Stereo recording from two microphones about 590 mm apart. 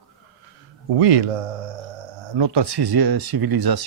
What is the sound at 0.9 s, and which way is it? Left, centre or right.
Speech, right.